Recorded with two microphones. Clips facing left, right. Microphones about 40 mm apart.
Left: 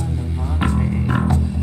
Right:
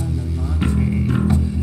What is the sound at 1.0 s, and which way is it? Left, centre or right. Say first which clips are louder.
Music: even; left.